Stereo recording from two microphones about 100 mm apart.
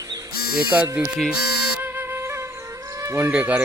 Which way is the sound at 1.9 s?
20° right (ahead or behind).